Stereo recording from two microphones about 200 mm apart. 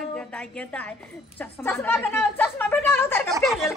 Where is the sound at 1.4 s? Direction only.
10° left (ahead or behind).